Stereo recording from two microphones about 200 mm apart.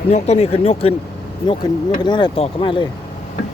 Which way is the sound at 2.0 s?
20° left (ahead or behind).